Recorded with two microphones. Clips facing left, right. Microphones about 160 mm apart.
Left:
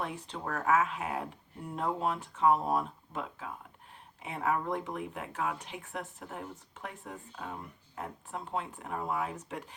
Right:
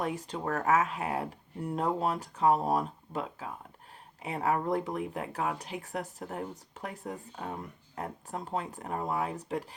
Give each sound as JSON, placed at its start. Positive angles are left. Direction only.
{"t": 0.0, "sound": "speech", "side_deg": -40}